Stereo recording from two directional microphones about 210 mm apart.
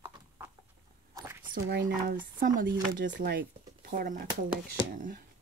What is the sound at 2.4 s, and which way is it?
Speech, 40° right (ahead or behind).